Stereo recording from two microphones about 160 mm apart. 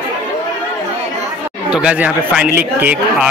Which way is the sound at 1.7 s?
5° right (ahead or behind).